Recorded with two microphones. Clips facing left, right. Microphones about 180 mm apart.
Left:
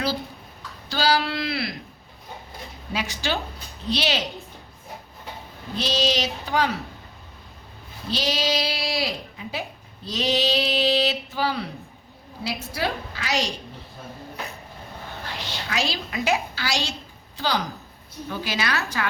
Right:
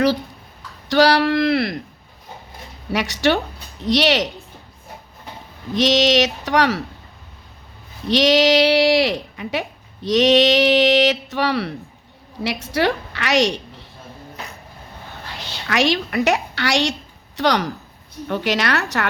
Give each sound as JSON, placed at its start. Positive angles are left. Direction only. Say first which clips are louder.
{"t": 0.9, "sound": "speech", "louder": "right 8 dB", "side_deg": -70}
{"t": 2.9, "sound": "speech", "louder": "right 9 dB", "side_deg": -75}
{"t": 5.7, "sound": "speech", "louder": "right 8 dB", "side_deg": -80}
{"t": 8.0, "sound": "speech", "louder": "right 11 dB", "side_deg": -75}
{"t": 12.7, "sound": "a woman's voice", "louder": "right 10 dB", "side_deg": -75}
{"t": 15.7, "sound": "speech", "louder": "right 9 dB", "side_deg": -75}
{"t": 16.0, "sound": "speech", "louder": "right 5 dB", "side_deg": -65}